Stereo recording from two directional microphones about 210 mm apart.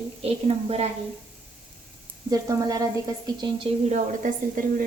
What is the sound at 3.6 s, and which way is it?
A woman's voice, 30° right (ahead or behind).